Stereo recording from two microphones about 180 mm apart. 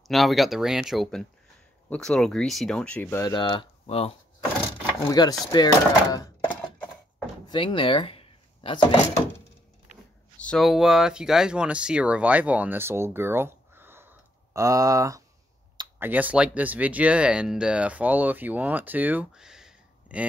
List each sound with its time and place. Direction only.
0.1 s speech: centre (ahead or behind); by 4.1 s 35° left (ahead or behind)
5.0 s speech: 20° left (ahead or behind)
7.4 s speech: 25° left (ahead or behind)
10.3 s speech: 5° left (ahead or behind)